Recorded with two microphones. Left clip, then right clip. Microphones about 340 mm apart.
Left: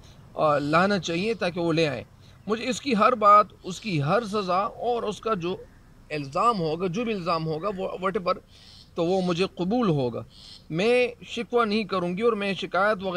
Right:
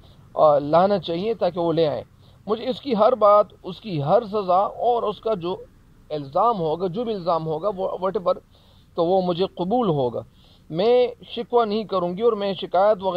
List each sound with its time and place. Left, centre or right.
0.4 s speech: centre